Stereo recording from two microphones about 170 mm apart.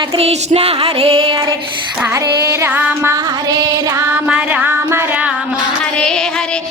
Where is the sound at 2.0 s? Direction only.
15° right (ahead or behind).